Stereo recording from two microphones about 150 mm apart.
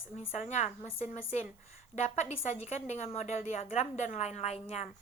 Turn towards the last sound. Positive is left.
turn(degrees=45)  # may be behind; listen again after turning